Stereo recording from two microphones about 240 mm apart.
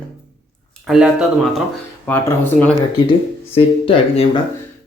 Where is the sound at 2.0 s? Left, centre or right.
Centre.